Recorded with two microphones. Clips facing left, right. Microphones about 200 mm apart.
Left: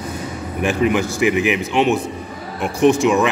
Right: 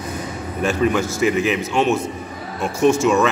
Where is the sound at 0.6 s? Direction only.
15° left (ahead or behind).